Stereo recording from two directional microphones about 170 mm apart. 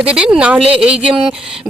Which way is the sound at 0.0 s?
5° right (ahead or behind).